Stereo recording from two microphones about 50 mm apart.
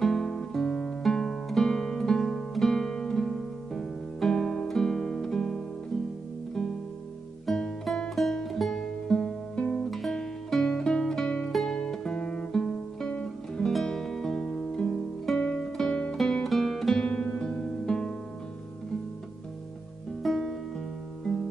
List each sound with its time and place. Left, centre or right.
0.0 s music: centre
7.4 s music: centre
9.8 s music: centre
10.1 s music: centre
12.5 s guitar: centre
13.1 s music: left
13.7 s music: centre
17.0 s guitar: left
17.4 s music: centre
20.2 s music: centre